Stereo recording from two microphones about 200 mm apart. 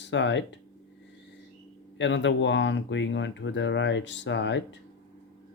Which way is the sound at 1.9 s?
65° left (ahead or behind).